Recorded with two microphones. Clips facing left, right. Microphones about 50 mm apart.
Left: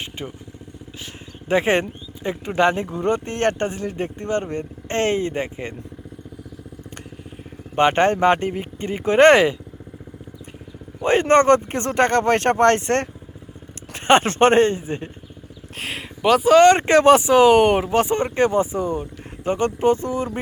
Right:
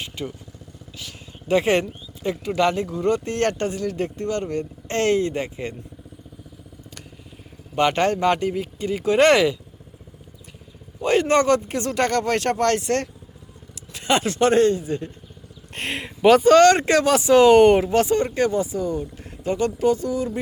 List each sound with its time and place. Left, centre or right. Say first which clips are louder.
0.0 s vehicle: right 1 dB; left
0.9 s speech: even; left
7.8 s speech: left 3 dB; left
11.0 s speech: left 3 dB; left
15.7 s speech: right 2 dB; centre
16.6 s speech: left 4 dB; left
17.3 s speech: right 1 dB; centre; by 20.4 s left